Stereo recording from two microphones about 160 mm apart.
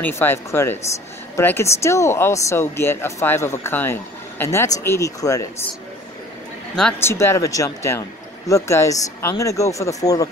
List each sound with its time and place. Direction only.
0.0 s speech: 15° left (ahead or behind)
6.8 s speech: 10° left (ahead or behind)